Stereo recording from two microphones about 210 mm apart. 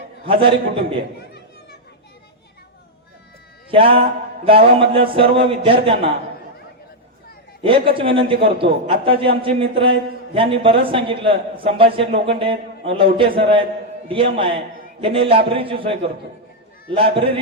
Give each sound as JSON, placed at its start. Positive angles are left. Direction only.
{"t": 0.3, "sound": "a man's voice", "side_deg": -25}
{"t": 3.7, "sound": "a man's voice", "side_deg": -25}
{"t": 7.6, "sound": "a man's voice", "side_deg": -25}